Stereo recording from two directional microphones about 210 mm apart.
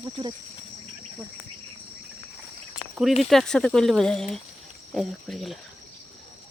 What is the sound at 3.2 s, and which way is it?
Speech, centre (ahead or behind).